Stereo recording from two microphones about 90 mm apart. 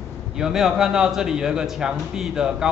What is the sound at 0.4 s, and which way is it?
A man's voice, 5° right (ahead or behind).